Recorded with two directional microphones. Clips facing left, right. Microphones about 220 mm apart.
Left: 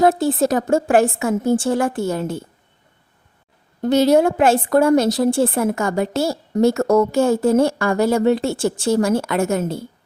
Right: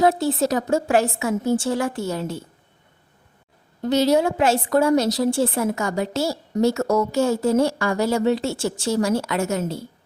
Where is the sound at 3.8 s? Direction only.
55° left (ahead or behind).